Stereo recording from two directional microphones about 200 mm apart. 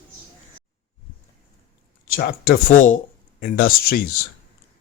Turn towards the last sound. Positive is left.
turn(degrees=45)  # may be behind; listen again after turning